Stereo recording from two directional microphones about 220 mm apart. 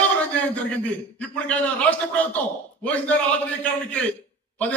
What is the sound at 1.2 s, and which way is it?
A man's voice, 5° left (ahead or behind).